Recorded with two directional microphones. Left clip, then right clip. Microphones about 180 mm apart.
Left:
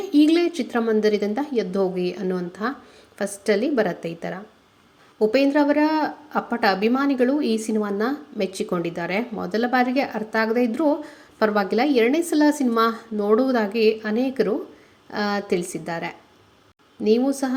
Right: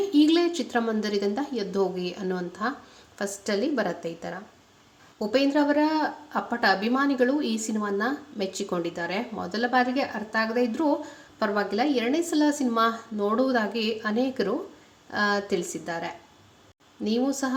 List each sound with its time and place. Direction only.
0.0 s a woman's voice: 15° left (ahead or behind)